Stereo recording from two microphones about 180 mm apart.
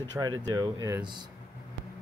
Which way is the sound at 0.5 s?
20° right (ahead or behind).